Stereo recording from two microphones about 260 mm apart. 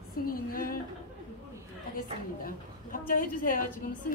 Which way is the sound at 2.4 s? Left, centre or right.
Left.